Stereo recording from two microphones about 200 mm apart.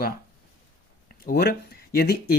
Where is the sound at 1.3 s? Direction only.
55° left (ahead or behind).